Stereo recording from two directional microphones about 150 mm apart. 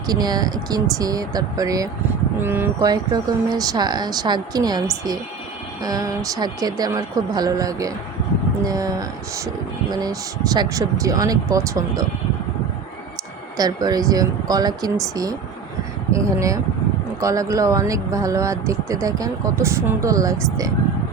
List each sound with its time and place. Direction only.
0.1 s speech: 25° right (ahead or behind)
13.6 s speech: 25° right (ahead or behind)